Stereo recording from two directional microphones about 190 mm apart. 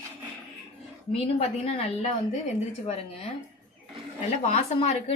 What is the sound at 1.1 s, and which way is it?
A woman's voice, 30° left (ahead or behind).